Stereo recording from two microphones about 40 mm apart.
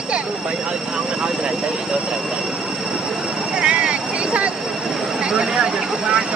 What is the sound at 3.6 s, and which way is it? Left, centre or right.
Vehicle, right.